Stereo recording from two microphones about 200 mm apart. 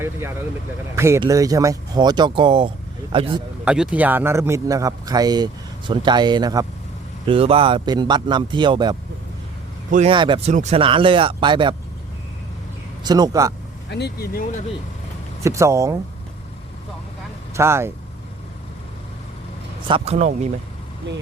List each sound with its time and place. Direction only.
0.9 s a man's voice: 15° right (ahead or behind)
3.6 s a man's voice: 5° right (ahead or behind); by 9.0 s 20° right (ahead or behind)
10.1 s speech: 25° right (ahead or behind)
13.1 s speech: 20° right (ahead or behind)
13.9 s speech: 55° left (ahead or behind)
15.4 s a man's voice: 15° right (ahead or behind)
17.5 s speech: 15° right (ahead or behind)
19.9 s speech: 35° right (ahead or behind)
21.1 s speech: 65° right (ahead or behind)